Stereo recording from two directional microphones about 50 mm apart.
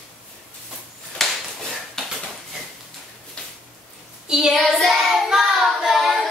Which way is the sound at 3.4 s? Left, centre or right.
Centre.